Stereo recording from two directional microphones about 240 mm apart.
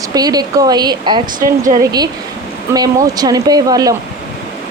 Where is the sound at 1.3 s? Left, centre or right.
Right.